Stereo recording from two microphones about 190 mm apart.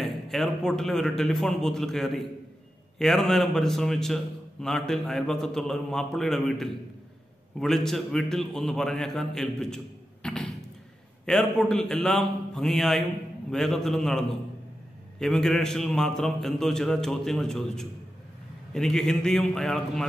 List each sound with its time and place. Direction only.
0.0 s a man's voice: centre (ahead or behind)
10.2 s a sound: 5° left (ahead or behind)
11.2 s a man's voice: 5° left (ahead or behind)